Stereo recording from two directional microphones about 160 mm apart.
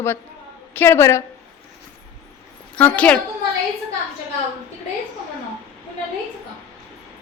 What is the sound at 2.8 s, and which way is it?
Speech, 10° left (ahead or behind).